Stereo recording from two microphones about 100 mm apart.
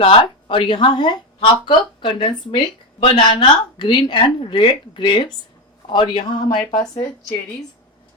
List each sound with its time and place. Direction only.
0.0 s a woman's voice: 65° left (ahead or behind); by 7.3 s 45° left (ahead or behind)